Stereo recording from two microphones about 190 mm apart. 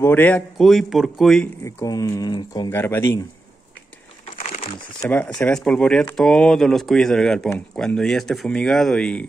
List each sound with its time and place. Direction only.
0.0 s speech: 10° left (ahead or behind)
1.6 s speech: 15° left (ahead or behind)
5.0 s speech: 10° left (ahead or behind)